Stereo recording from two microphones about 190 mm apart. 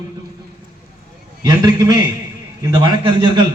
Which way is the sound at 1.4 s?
20° right (ahead or behind).